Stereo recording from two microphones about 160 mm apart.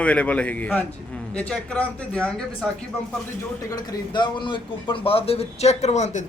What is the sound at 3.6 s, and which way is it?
A man's voice, 25° left (ahead or behind).